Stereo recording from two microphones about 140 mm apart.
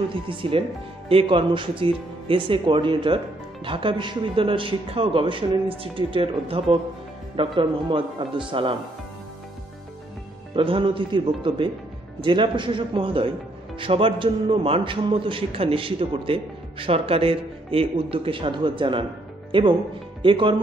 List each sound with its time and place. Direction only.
0.1 s a man's voice: 40° right (ahead or behind)
10.5 s a man's voice: 40° right (ahead or behind)